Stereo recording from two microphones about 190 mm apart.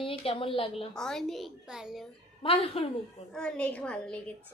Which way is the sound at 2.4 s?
30° left (ahead or behind).